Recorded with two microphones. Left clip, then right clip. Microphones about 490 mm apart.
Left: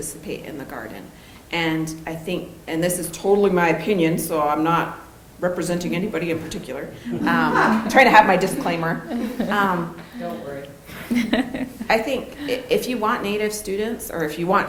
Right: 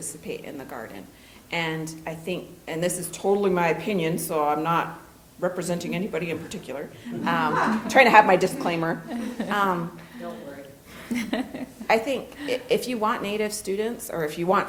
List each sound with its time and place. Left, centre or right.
0.3 s a woman's voice: right
1.5 s a woman's voice: right
9.4 s a woman's voice: centre
11.1 s a woman's voice: centre
11.9 s a woman's voice: right